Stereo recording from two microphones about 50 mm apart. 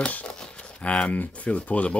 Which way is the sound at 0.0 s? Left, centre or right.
Left.